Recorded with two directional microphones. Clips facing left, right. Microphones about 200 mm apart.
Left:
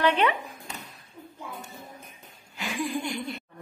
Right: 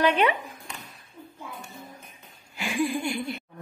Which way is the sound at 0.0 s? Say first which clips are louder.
Right 1 dB; 10° right (ahead or behind).